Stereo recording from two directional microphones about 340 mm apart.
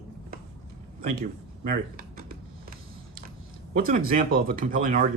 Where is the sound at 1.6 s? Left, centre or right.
Right.